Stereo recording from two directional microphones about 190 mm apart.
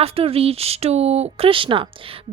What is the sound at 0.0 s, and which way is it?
Speech, 30° right (ahead or behind).